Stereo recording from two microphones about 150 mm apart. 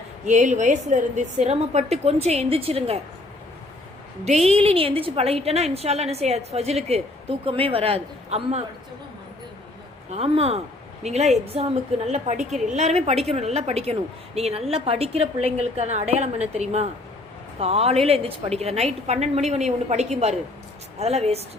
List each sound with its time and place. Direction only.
0.3 s a woman's voice: 55° right (ahead or behind)
4.3 s a woman's voice: 45° right (ahead or behind)
10.1 s a woman's voice: 40° right (ahead or behind)